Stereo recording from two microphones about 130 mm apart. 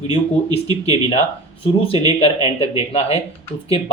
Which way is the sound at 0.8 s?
50° left (ahead or behind).